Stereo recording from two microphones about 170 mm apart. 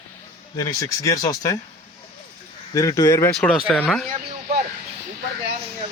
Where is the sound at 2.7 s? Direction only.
20° left (ahead or behind).